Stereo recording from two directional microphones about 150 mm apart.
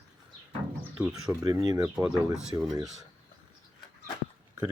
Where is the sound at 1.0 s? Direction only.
20° right (ahead or behind).